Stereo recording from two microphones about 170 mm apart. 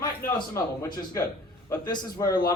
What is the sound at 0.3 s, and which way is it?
A man's voice, 20° left (ahead or behind).